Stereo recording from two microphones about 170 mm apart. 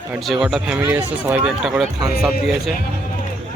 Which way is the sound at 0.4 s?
5° right (ahead or behind).